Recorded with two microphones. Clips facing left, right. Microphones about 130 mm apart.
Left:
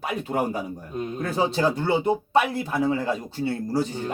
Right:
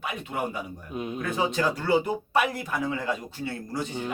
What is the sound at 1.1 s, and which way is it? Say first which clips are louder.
Speech: left 3 dB; 35° left (ahead or behind).